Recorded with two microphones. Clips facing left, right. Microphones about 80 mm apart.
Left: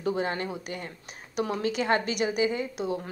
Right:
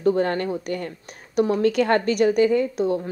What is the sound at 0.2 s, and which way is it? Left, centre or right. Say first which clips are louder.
A woman's voice: right 7 dB; right.